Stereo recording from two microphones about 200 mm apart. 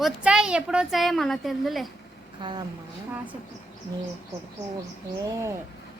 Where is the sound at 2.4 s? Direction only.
20° right (ahead or behind).